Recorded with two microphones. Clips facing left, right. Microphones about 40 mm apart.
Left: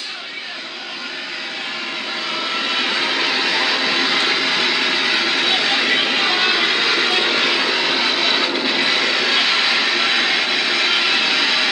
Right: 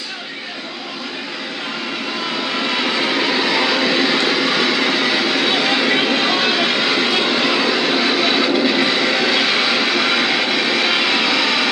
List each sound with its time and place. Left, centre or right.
3.0 s vehicle: centre
4.2 s vehicle: centre
4.8 s a sound: centre
5.6 s vehicle: centre
5.9 s vehicle: centre
9.0 s vehicle: centre
9.3 s vehicle: centre